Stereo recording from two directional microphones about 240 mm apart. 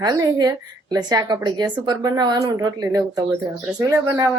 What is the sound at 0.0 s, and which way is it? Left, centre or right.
A woman's voice, centre.